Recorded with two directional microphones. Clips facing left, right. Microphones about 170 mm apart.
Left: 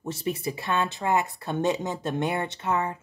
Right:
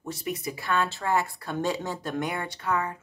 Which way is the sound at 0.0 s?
25° left (ahead or behind).